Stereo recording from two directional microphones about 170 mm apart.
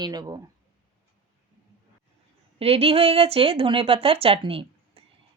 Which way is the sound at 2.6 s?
35° right (ahead or behind).